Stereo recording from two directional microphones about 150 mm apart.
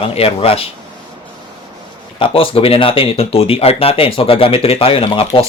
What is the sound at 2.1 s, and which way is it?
Speech, 35° left (ahead or behind).